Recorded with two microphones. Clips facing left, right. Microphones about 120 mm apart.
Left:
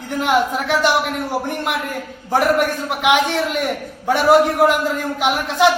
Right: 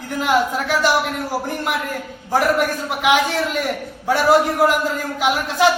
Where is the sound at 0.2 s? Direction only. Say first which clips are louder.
Left 1 dB; centre (ahead or behind).